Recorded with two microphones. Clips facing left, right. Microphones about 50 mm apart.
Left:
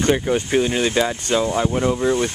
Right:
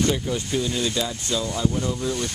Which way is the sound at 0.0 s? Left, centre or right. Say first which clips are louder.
Left 5 dB; left.